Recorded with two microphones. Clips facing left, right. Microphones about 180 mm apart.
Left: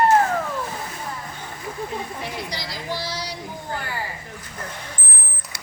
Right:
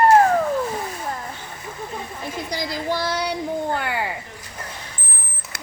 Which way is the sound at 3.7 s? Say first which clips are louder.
Right 5 dB; 65° right (ahead or behind).